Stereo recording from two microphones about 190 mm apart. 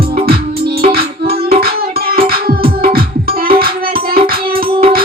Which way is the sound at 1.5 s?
50° right (ahead or behind).